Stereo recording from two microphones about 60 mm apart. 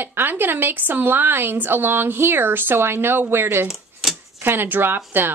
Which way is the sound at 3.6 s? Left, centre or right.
Centre.